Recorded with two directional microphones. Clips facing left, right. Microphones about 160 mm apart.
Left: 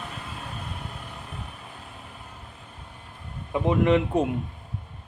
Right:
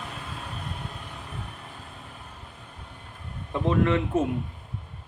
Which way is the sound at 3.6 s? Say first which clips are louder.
Left 2 dB; 15° left (ahead or behind).